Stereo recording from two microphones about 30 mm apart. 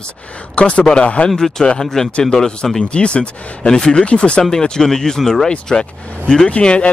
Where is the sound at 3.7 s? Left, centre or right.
Left.